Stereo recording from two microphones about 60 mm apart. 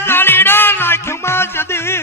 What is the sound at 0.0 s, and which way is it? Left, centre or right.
Music, left.